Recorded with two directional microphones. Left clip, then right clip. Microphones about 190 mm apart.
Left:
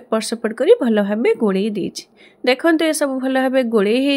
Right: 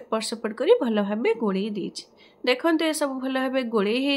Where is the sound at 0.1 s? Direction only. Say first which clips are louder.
Left 7 dB; 30° left (ahead or behind).